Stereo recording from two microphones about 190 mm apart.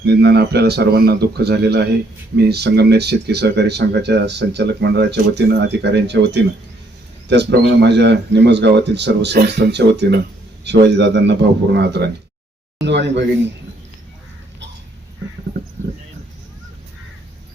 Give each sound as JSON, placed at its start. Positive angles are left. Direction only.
{"t": 0.0, "sound": "speech", "side_deg": -60}